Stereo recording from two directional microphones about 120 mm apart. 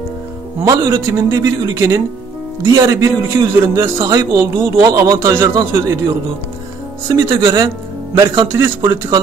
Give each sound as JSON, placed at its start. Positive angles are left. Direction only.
{"t": 0.7, "sound": "a man's voice", "side_deg": -25}
{"t": 7.1, "sound": "a man's voice", "side_deg": -25}